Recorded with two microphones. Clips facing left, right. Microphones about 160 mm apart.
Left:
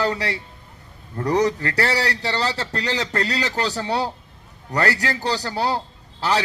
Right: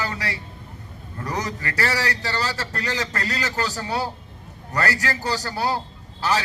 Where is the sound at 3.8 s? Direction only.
30° left (ahead or behind).